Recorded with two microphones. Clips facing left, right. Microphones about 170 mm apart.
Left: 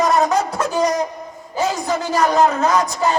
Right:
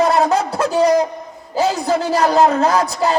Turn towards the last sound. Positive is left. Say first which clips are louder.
# right 1 dB
turn(degrees=-35)  # may be behind; listen again after turning